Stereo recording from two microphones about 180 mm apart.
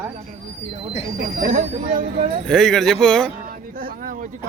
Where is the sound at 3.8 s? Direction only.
50° right (ahead or behind).